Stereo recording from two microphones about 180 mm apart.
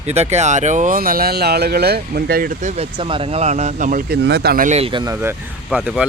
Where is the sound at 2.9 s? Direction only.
30° right (ahead or behind); by 4.2 s 50° right (ahead or behind).